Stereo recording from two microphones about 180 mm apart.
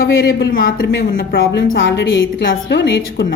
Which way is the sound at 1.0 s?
80° left.